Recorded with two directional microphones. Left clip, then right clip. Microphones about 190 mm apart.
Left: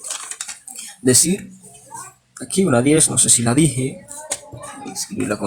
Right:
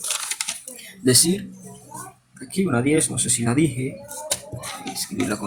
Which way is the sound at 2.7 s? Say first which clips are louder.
Left 5 dB; 50° left (ahead or behind).